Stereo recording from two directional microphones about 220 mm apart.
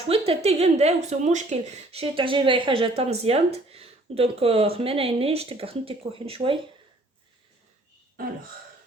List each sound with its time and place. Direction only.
0.1 s speech: 25° right (ahead or behind)